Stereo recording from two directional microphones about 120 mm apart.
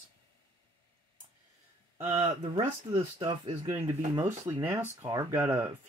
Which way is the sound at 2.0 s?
55° right (ahead or behind).